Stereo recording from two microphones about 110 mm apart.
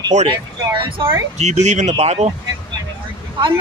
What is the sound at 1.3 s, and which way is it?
Speech, 90° right.